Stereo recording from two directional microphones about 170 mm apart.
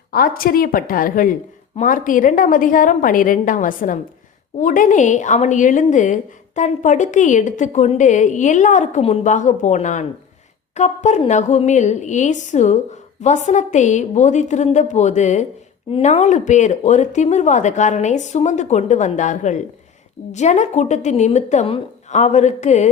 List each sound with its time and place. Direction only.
0.1 s a woman's voice: 60° left (ahead or behind); by 22.9 s 40° left (ahead or behind)